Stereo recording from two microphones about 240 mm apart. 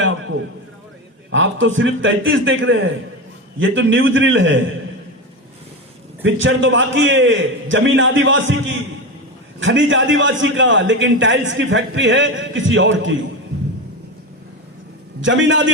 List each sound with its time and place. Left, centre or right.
1.3 s a man's voice: right
6.2 s a man's voice: right
15.2 s a man's voice: right